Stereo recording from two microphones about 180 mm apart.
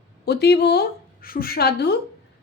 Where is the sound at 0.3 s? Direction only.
65° left (ahead or behind).